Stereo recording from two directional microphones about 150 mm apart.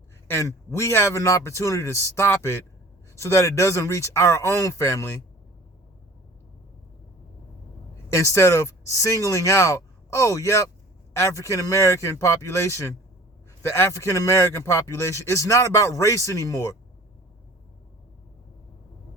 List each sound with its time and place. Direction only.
0.3 s a man's voice: 20° left (ahead or behind)
8.1 s a man's voice: 20° left (ahead or behind)